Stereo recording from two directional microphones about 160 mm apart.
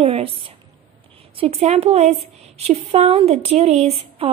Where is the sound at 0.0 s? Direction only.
35° right (ahead or behind).